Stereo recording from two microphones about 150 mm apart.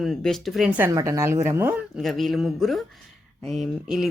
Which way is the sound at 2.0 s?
Centre (ahead or behind).